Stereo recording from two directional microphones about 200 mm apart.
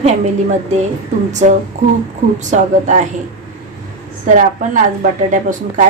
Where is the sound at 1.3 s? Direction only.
35° right (ahead or behind).